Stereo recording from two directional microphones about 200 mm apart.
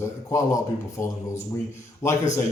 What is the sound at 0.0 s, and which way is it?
A man's voice, 15° left (ahead or behind).